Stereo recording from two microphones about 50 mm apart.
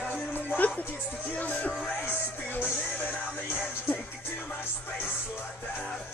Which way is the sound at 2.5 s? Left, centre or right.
Left.